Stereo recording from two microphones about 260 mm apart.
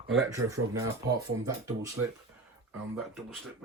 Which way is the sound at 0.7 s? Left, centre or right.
Centre.